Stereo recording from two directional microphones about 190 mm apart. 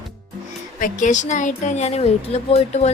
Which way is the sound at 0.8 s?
40° left (ahead or behind).